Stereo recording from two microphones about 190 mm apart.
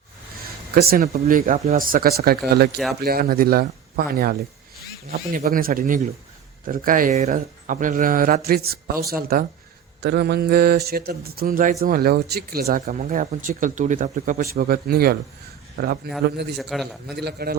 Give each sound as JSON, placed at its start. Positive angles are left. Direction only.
{"t": 0.8, "sound": "speech", "side_deg": -55}
{"t": 14.5, "sound": "a man's voice", "side_deg": -50}
{"t": 16.6, "sound": "a man's voice", "side_deg": 0}
{"t": 17.2, "sound": "a man's voice", "side_deg": -55}